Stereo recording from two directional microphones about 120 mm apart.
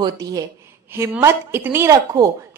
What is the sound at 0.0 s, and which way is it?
A woman's voice, 30° right (ahead or behind).